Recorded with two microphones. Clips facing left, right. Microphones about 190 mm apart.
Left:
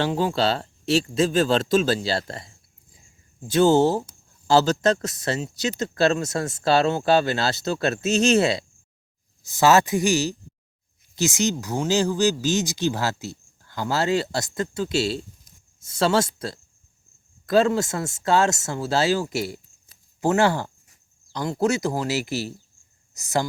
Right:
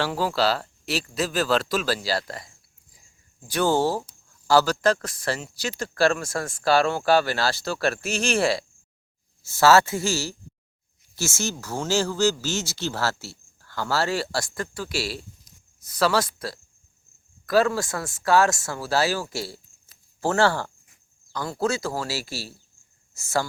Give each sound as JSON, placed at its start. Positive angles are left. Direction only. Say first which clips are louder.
{"t": 0.0, "sound": "speech", "louder": "left 2 dB", "side_deg": 20}